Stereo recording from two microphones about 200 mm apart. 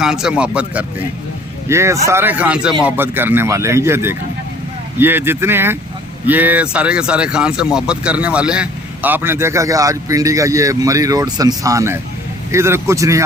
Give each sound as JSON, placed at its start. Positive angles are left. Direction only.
{"t": 0.0, "sound": "speech", "side_deg": -5}